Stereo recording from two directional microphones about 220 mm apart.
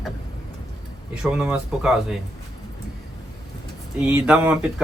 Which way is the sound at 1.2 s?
5° right (ahead or behind).